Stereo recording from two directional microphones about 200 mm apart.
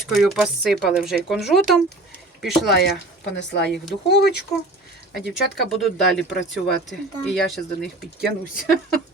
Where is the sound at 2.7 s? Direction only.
55° left (ahead or behind).